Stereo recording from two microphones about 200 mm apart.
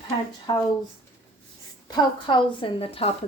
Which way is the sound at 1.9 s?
25° left (ahead or behind).